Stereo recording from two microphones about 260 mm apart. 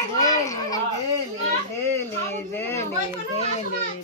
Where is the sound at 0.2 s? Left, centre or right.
Centre.